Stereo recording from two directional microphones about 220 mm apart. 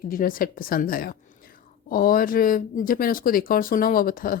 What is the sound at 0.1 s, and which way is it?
Speech, 40° left (ahead or behind).